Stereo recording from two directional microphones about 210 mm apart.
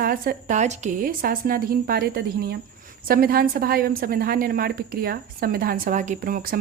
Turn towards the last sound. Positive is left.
turn(degrees=-45)  # may be behind; listen again after turning